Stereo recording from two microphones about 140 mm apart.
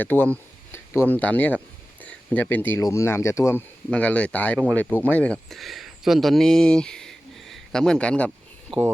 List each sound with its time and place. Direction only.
0.0 s speech: 15° left (ahead or behind)
3.8 s speech: 10° left (ahead or behind)